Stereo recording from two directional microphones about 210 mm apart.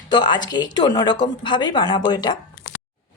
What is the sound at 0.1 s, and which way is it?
A woman's voice, 20° left (ahead or behind).